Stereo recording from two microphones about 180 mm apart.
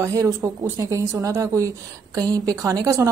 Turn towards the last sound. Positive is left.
turn(degrees=-15)  # may be behind; listen again after turning